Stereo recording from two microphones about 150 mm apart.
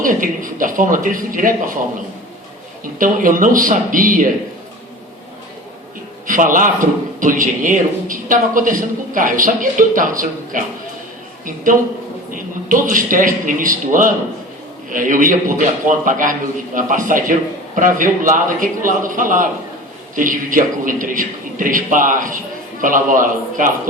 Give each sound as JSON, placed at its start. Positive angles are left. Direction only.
{"t": 0.0, "sound": "a man's voice", "side_deg": -65}
{"t": 3.0, "sound": "a man's voice", "side_deg": -65}
{"t": 6.2, "sound": "a man's voice", "side_deg": -60}